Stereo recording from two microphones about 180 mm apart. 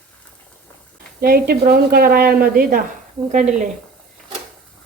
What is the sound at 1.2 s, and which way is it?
A woman's voice, 55° right (ahead or behind).